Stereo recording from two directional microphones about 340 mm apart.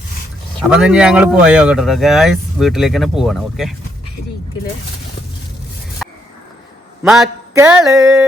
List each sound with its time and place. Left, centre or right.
0.7 s speech: centre
6.0 s a sound: centre
7.0 s mantra: centre